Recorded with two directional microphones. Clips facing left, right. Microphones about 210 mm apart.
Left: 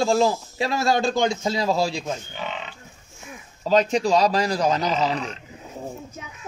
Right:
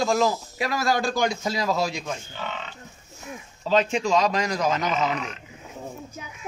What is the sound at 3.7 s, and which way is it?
A man's voice, 40° left (ahead or behind).